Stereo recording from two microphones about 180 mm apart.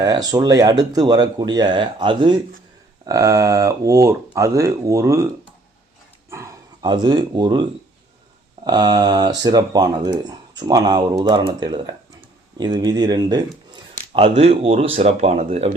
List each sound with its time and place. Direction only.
0.0 s speech: 20° right (ahead or behind)
6.3 s dog: 20° right (ahead or behind)
8.6 s speech: 25° right (ahead or behind)